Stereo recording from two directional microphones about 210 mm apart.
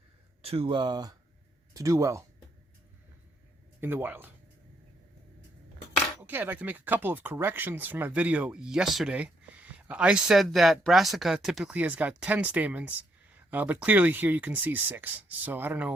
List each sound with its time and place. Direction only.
0.4 s speech: 25° right (ahead or behind)
3.8 s speech: 10° right (ahead or behind)
6.1 s speech: 10° right (ahead or behind)